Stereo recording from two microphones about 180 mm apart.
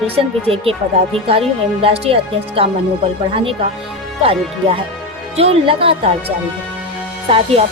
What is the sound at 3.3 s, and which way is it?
Speech, 30° right (ahead or behind).